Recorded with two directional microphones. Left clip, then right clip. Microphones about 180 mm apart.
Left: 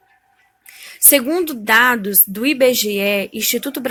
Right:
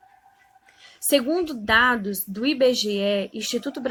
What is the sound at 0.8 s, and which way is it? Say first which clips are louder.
A woman's voice: left 5 dB; 30° left (ahead or behind).